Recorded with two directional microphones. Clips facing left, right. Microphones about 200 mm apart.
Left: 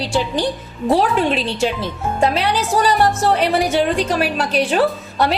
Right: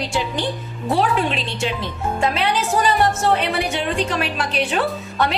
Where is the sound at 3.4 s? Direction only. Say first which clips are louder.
Left 6 dB; 40° left (ahead or behind).